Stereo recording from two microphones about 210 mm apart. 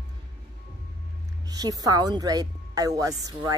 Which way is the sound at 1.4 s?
20° right (ahead or behind).